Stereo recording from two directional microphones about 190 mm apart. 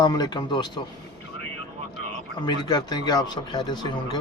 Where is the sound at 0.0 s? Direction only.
20° left (ahead or behind).